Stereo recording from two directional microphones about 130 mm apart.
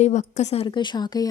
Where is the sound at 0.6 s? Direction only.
35° left (ahead or behind).